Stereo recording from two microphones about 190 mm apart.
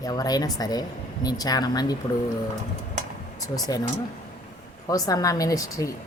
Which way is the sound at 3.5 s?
20° left (ahead or behind).